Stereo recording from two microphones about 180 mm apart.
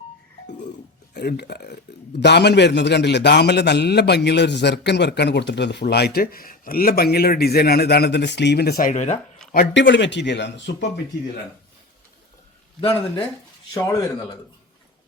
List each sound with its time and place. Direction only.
1.1 s a man's voice: 65° left (ahead or behind)
8.9 s speech: 40° left (ahead or behind)
9.7 s a man's voice: 85° left
13.7 s speech: 20° left (ahead or behind)